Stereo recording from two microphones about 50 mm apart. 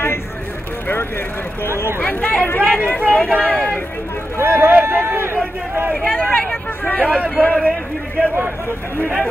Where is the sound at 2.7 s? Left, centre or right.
Left; by 3.8 s centre.